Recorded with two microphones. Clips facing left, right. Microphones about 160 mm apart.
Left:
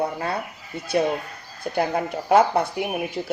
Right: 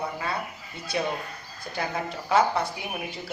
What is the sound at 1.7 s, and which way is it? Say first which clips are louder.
Speech: left 10 dB; 60° left (ahead or behind).